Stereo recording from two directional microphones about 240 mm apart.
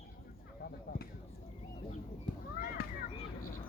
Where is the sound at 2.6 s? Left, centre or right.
Left.